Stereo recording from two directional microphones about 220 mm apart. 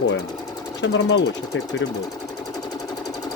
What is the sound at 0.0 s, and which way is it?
Speech, 55° left (ahead or behind).